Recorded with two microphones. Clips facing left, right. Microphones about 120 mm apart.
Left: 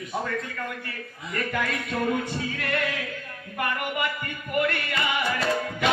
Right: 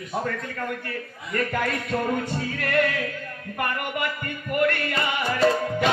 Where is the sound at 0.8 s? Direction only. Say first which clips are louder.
Right 4 dB; 45° right (ahead or behind).